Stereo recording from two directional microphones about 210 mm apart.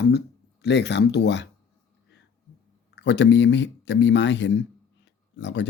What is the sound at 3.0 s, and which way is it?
Speech, 60° left (ahead or behind).